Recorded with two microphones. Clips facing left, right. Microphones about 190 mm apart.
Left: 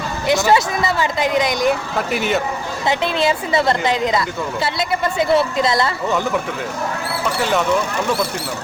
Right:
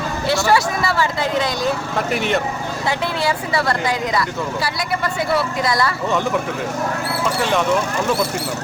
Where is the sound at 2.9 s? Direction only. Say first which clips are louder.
Left 3 dB; 20° left (ahead or behind).